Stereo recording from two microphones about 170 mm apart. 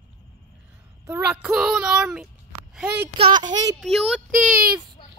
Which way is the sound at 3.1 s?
30° right (ahead or behind).